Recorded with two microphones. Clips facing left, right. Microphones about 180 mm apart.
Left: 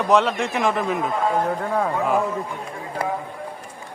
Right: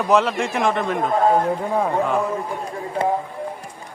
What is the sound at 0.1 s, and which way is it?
Speech, centre (ahead or behind).